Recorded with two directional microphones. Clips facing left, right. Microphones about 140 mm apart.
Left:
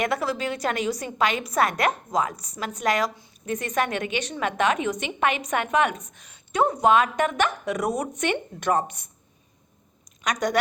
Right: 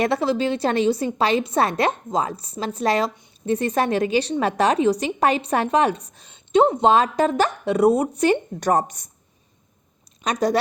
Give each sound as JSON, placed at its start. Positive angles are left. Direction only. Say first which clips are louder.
{"t": 0.0, "sound": "a woman's voice", "louder": "right 5 dB", "side_deg": -30}
{"t": 10.2, "sound": "a woman's voice", "louder": "right 4 dB", "side_deg": -30}